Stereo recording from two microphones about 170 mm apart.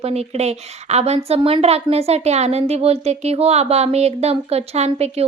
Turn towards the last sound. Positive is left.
turn(degrees=-40)  # may be behind; listen again after turning